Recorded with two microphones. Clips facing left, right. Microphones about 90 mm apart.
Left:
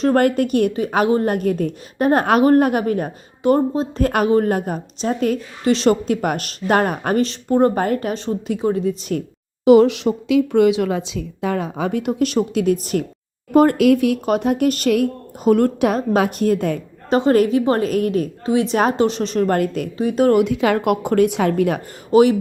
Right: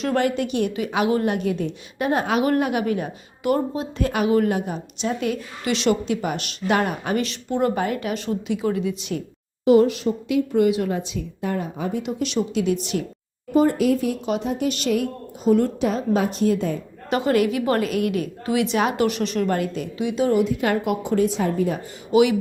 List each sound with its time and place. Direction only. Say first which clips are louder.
0.0 s a woman's voice: left 6 dB; 45° left (ahead or behind)
2.4 s a woman's voice: left 6 dB; 40° left (ahead or behind)
9.6 s a woman's voice: left 5 dB; 90° left; by 13.1 s 45° left (ahead or behind)
13.5 s speech: left 5 dB; 65° left (ahead or behind); by 14.2 s 80° left
14.3 s speech: left 6 dB; 60° left (ahead or behind)
17.1 s a woman's voice: left 5 dB; 35° left (ahead or behind)
19.5 s a woman's voice: left 5 dB; 50° left (ahead or behind); by 21.8 s 70° left (ahead or behind)
22.1 s a woman's voice: left 4 dB; 40° left (ahead or behind)